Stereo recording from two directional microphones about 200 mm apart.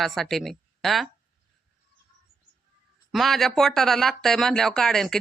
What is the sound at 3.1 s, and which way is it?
A woman's voice, centre (ahead or behind).